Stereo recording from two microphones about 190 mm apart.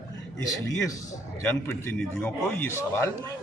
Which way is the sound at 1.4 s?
15° left (ahead or behind).